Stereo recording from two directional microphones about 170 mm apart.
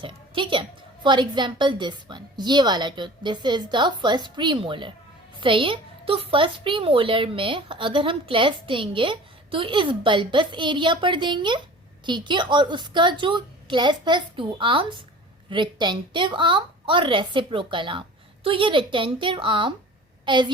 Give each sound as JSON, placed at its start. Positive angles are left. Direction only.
{"t": 0.0, "sound": "a woman's voice", "side_deg": -30}